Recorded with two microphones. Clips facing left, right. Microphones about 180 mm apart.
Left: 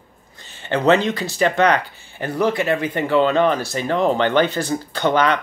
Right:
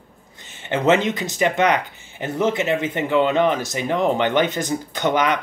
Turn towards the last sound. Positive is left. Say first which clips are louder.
# left 2 dB
turn(degrees=-15)  # may be behind; listen again after turning